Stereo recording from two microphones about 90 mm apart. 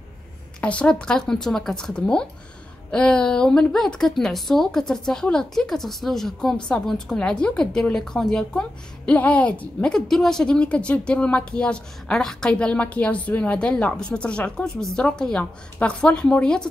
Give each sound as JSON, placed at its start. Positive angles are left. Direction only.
{"t": 0.6, "sound": "speech", "side_deg": 15}
{"t": 9.9, "sound": "speech", "side_deg": 5}